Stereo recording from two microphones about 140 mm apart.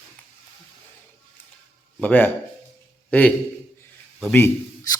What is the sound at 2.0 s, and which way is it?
A man's voice, 10° left (ahead or behind).